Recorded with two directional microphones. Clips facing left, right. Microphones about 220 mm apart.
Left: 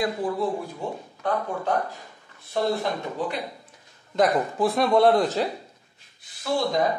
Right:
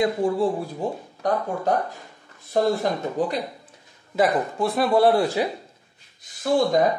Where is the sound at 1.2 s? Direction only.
40° right (ahead or behind).